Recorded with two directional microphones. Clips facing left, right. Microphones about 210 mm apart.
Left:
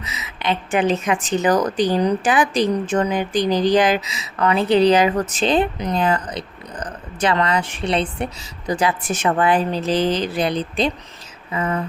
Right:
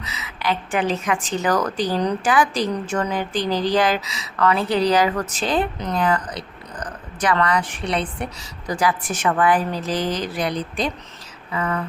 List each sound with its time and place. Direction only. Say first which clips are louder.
0.0 s a woman's voice: left 1 dB; 20° left (ahead or behind)